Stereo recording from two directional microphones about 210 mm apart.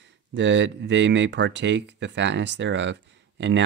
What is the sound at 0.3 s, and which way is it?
Speech, 60° right (ahead or behind).